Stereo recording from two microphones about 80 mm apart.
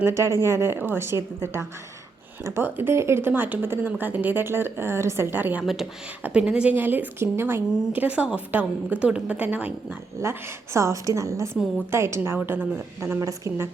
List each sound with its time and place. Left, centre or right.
0.0 s a woman's voice: right
5.6 s a woman's voice: centre
6.7 s speech: right
10.8 s a woman's voice: right
13.1 s a woman's voice: right